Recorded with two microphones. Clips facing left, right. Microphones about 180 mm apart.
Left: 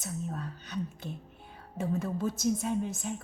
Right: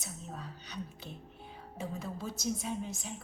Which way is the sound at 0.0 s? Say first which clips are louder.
Left 7 dB; 50° left (ahead or behind).